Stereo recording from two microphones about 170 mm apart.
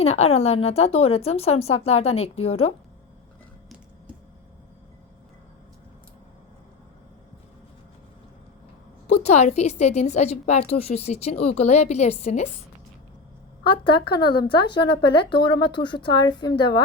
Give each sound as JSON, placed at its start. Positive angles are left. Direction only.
{"t": 0.0, "sound": "a woman's voice", "side_deg": 35}
{"t": 9.0, "sound": "a woman's voice", "side_deg": 40}
{"t": 13.7, "sound": "speech", "side_deg": 30}